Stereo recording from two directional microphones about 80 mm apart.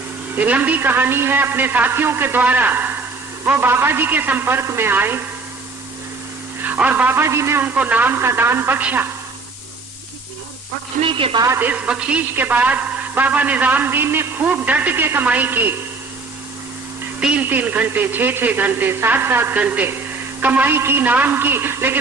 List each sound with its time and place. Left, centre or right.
0.3 s speech: centre
6.6 s a man's voice: right
7.6 s speech: centre
11.0 s a woman's voice: right
11.6 s speech: centre
14.4 s speech: centre
17.2 s speech: centre